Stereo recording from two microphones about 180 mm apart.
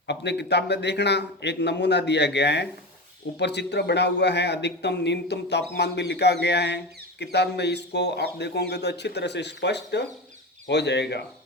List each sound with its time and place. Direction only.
0.1 s a man's voice: 70° left (ahead or behind)